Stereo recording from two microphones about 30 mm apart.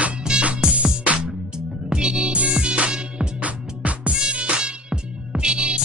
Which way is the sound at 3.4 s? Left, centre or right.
Right.